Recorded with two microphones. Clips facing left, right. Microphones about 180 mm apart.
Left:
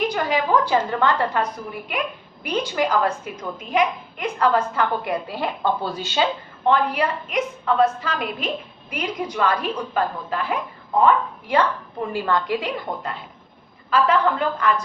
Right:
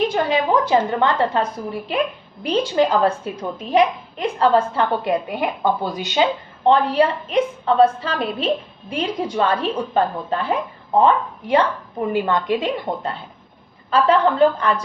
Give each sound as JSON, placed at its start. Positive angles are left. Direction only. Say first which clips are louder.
{"t": 0.0, "sound": "a woman's voice", "louder": "right 3 dB", "side_deg": -25}
{"t": 6.7, "sound": "a woman's voice", "louder": "right 4 dB", "side_deg": -30}